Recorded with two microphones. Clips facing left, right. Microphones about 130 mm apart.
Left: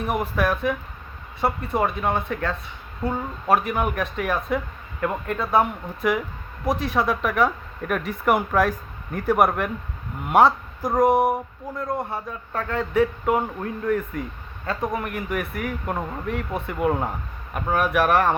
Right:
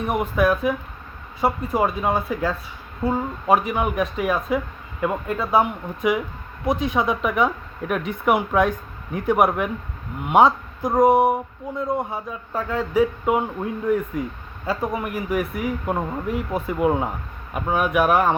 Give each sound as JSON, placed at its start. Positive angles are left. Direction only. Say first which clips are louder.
{"t": 0.0, "sound": "speech", "louder": "right 3 dB", "side_deg": 0}
{"t": 3.0, "sound": "speech", "louder": "right 4 dB", "side_deg": -20}
{"t": 3.4, "sound": "speech", "louder": "right 1 dB", "side_deg": 0}
{"t": 4.9, "sound": "speech", "louder": "right 2 dB", "side_deg": -10}
{"t": 5.4, "sound": "speech", "louder": "right 1 dB", "side_deg": 0}